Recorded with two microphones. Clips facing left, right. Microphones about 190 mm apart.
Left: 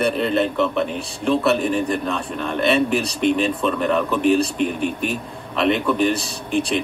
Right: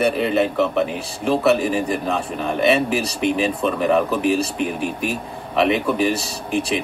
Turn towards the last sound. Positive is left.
turn(degrees=-5)  # may be behind; listen again after turning